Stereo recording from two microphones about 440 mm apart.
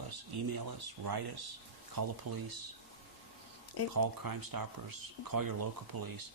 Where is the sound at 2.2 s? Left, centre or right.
Right.